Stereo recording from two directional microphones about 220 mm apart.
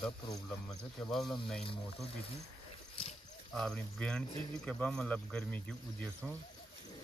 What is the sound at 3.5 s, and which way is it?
Speech, centre (ahead or behind).